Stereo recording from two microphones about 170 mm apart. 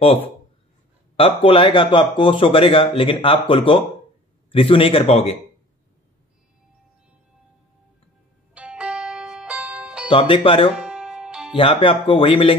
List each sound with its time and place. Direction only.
1.1 s speech: 30° left (ahead or behind)
8.5 s music: 5° right (ahead or behind)
10.0 s speech: 30° left (ahead or behind)
10.7 s music: 5° right (ahead or behind)
11.5 s speech: 30° left (ahead or behind)